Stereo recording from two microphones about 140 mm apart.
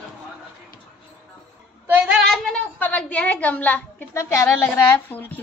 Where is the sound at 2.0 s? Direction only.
5° right (ahead or behind); by 4.3 s 10° left (ahead or behind).